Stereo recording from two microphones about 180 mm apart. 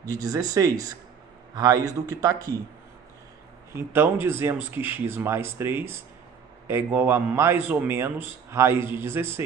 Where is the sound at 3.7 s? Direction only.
15° right (ahead or behind).